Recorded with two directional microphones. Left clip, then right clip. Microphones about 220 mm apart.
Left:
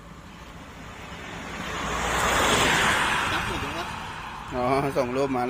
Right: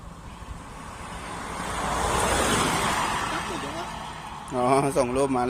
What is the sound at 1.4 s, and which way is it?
Vehicle, 20° right (ahead or behind).